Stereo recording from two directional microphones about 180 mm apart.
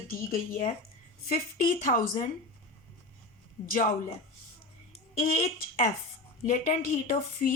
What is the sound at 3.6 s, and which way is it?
A woman's voice, 45° left (ahead or behind).